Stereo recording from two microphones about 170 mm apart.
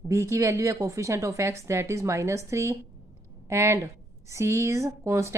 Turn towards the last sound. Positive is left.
turn(degrees=-15)  # may be behind; listen again after turning